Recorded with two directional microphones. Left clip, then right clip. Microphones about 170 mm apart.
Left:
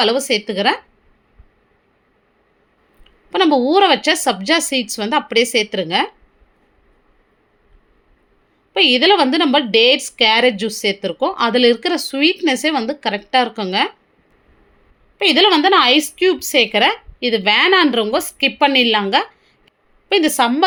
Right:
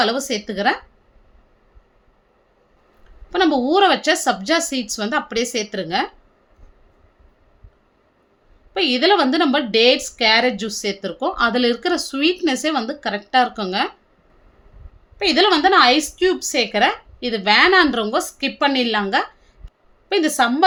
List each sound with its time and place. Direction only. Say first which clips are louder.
0.0 s a woman's voice: left 4 dB; 20° left (ahead or behind)
3.2 s a woman's voice: left 3 dB; 15° left (ahead or behind)
8.7 s a woman's voice: left 4 dB; 15° left (ahead or behind)
15.2 s a woman's voice: left 3 dB; 20° left (ahead or behind)